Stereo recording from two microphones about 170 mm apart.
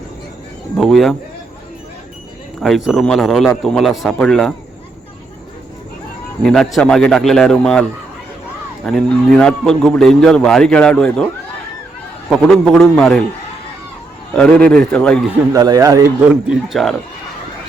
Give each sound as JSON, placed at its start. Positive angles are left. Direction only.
{"t": 0.8, "sound": "a man's voice", "side_deg": 0}
{"t": 2.6, "sound": "a man's voice", "side_deg": 0}
{"t": 6.4, "sound": "a man's voice", "side_deg": 5}
{"t": 12.3, "sound": "a man's voice", "side_deg": 5}
{"t": 14.3, "sound": "a man's voice", "side_deg": 5}
{"t": 15.5, "sound": "speech", "side_deg": -20}
{"t": 16.2, "sound": "a man's voice", "side_deg": -5}